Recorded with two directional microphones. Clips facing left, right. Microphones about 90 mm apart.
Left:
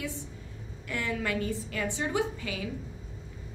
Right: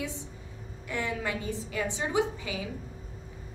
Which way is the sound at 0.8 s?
20° right (ahead or behind).